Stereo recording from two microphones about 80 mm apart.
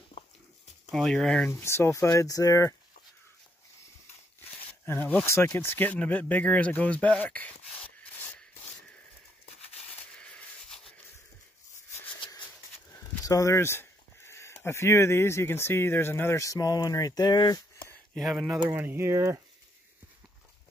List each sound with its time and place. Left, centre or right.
0.8 s speech: centre
1.5 s speech: left
4.5 s a sound: left
5.2 s speech: left; by 8.7 s centre
10.1 s a sound: centre
13.2 s speech: left
18.3 s speech: centre
18.7 s speech: right